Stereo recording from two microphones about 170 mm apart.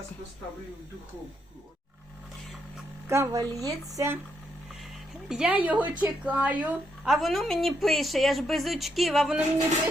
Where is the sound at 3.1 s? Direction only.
15° right (ahead or behind).